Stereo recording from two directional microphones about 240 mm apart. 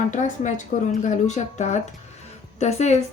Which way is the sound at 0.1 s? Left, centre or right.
Left.